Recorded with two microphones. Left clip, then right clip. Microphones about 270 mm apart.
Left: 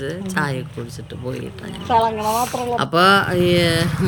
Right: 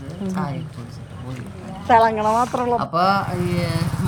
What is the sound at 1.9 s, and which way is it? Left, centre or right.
Speech, centre.